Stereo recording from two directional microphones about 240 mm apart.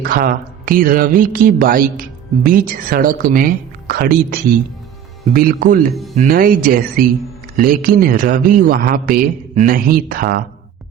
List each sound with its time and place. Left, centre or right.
0.0 s speech: right